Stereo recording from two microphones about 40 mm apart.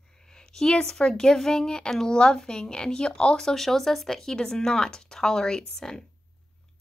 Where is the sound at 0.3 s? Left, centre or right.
Centre.